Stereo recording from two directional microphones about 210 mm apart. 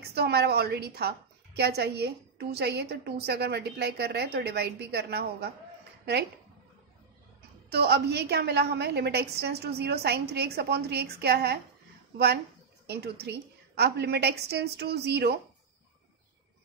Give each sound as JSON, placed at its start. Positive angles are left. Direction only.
{"t": 0.0, "sound": "a woman's voice", "side_deg": -50}
{"t": 7.7, "sound": "a woman's voice", "side_deg": -50}
{"t": 12.8, "sound": "a woman's voice", "side_deg": -50}